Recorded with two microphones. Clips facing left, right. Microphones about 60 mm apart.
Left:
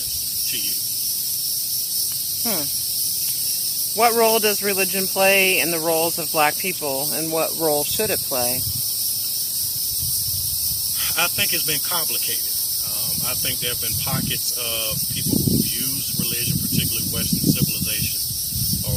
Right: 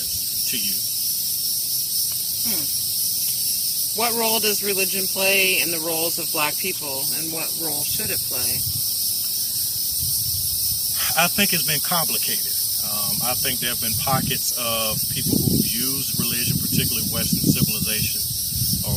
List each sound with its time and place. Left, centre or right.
4.0 s snake: left
4.6 s speech: left
5.9 s snake: left
7.3 s cricket: left
11.2 s snake: centre
14.7 s snake: centre